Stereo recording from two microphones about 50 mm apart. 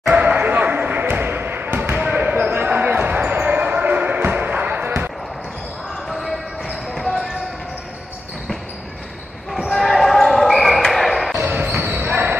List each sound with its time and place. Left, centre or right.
0.1 s basketball bounce: right
2.0 s basketball bounce: right
6.0 s basketball bounce: centre
9.7 s basketball bounce: centre
11.4 s basketball bounce: right